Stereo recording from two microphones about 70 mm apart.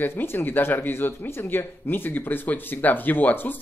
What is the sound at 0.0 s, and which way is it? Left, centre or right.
Speech, left.